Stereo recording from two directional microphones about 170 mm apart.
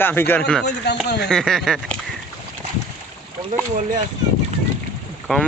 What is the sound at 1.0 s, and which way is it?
Speech, 80° left.